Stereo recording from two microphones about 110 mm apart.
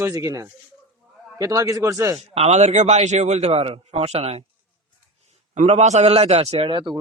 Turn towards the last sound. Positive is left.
turn(degrees=-50)  # may be behind; listen again after turning